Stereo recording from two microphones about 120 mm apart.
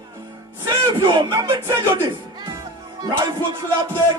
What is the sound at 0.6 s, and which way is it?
Music, 40° right (ahead or behind).